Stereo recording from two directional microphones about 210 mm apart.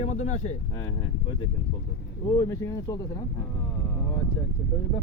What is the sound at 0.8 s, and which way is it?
Speech, 20° left (ahead or behind).